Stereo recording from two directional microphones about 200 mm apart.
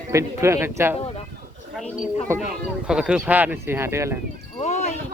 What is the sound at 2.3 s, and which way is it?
Speech, 15° right (ahead or behind).